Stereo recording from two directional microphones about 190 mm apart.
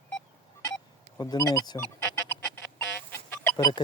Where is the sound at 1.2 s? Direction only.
20° left (ahead or behind).